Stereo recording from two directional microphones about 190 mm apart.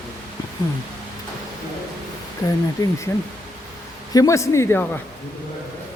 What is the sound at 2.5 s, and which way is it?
A man's voice, 15° left (ahead or behind).